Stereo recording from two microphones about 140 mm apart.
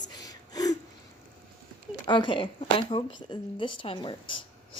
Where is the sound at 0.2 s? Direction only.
25° left (ahead or behind).